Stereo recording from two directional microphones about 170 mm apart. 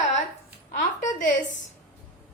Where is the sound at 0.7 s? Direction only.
50° left (ahead or behind).